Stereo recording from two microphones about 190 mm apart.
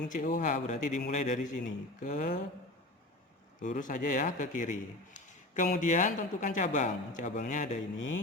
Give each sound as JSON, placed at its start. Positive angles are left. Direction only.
{"t": 0.1, "sound": "a man's voice", "side_deg": 45}
{"t": 3.6, "sound": "a man's voice", "side_deg": 40}